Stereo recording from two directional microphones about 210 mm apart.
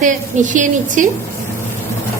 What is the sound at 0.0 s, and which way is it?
A woman's voice, 35° right (ahead or behind).